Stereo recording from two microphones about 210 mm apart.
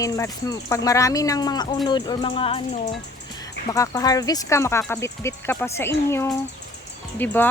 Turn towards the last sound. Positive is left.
turn(degrees=10)  # may be behind; listen again after turning